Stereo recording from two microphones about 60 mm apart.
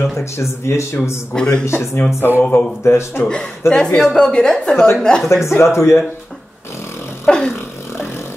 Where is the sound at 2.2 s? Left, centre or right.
Left.